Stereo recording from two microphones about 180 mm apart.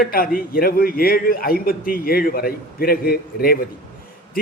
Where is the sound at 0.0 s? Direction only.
55° left (ahead or behind).